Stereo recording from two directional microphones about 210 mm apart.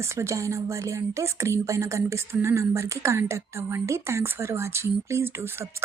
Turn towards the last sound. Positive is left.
turn(degrees=-10)  # may be behind; listen again after turning